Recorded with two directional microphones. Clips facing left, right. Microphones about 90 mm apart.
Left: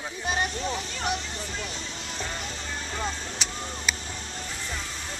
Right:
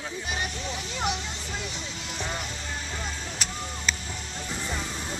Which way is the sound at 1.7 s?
15° right (ahead or behind).